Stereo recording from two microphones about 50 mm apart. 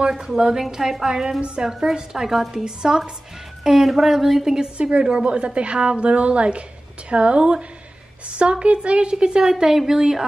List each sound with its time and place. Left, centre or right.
0.1 s a woman's voice: centre
4.7 s a woman's voice: centre